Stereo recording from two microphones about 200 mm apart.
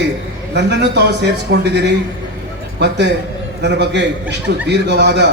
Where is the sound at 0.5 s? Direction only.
55° right (ahead or behind).